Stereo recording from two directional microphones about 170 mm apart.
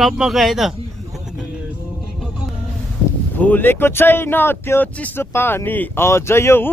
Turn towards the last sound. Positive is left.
turn(degrees=15)  # may be behind; listen again after turning